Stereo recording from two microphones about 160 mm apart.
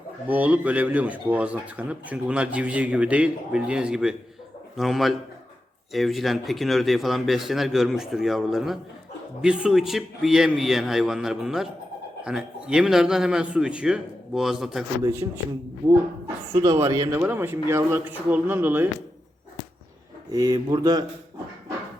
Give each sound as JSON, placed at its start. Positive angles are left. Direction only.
{"t": 0.3, "sound": "a man's voice", "side_deg": -10}
{"t": 15.0, "sound": "speech", "side_deg": -15}
{"t": 16.6, "sound": "speech", "side_deg": -20}
{"t": 20.3, "sound": "a man's voice", "side_deg": -25}